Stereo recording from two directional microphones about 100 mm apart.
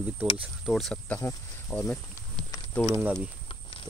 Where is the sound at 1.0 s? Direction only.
15° left (ahead or behind).